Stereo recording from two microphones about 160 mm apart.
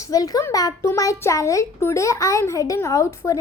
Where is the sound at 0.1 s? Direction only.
25° left (ahead or behind).